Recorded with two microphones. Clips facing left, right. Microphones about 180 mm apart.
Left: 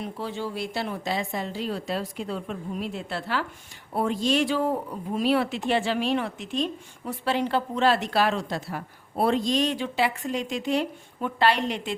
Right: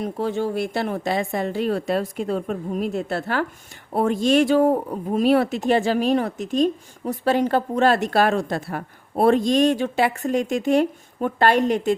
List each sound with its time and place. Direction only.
0.0 s speech: 50° right (ahead or behind)